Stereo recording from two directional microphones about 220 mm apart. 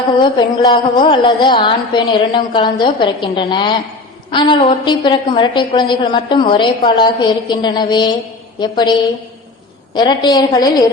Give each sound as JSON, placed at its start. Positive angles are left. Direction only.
{"t": 0.2, "sound": "a woman's voice", "side_deg": 20}
{"t": 9.9, "sound": "a woman's voice", "side_deg": 20}